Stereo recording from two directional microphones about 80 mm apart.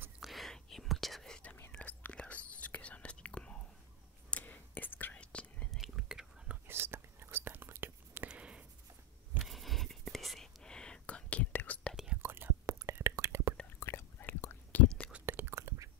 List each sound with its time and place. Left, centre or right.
0.2 s whispering: centre
5.7 s whispering: centre
6.7 s whispering: right
8.3 s writing: centre
9.4 s whispering: centre
12.2 s whispering: right
13.7 s whispering: left
14.7 s whispering: centre
15.2 s whispering: right